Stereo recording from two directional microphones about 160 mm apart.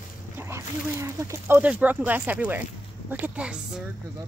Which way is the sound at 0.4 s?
15° right (ahead or behind).